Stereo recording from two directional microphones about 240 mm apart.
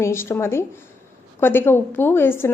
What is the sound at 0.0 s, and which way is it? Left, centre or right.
A woman's voice, centre.